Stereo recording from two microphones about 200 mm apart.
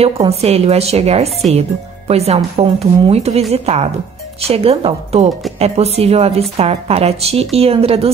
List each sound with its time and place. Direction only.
0.0 s speech: 30° right (ahead or behind)